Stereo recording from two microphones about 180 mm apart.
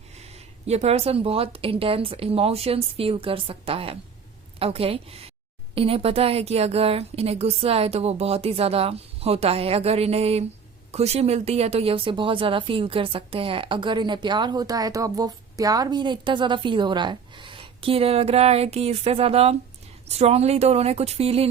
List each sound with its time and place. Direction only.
0.2 s a woman's voice: 35° right (ahead or behind)